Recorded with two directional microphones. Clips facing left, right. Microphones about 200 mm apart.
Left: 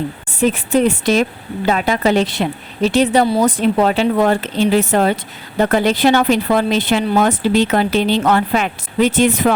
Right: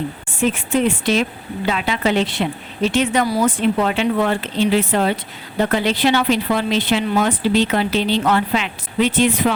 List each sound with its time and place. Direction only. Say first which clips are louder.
0.3 s a woman's voice: left 4 dB; 40° left (ahead or behind)
3.4 s a woman's voice: left 3 dB; 40° left (ahead or behind)